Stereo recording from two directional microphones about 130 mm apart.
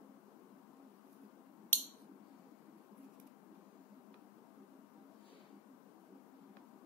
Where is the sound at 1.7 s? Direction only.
15° left (ahead or behind).